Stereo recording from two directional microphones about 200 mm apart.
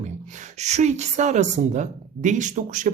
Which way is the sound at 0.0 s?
35° right (ahead or behind).